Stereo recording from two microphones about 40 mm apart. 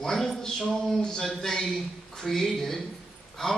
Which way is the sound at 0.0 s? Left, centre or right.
Centre.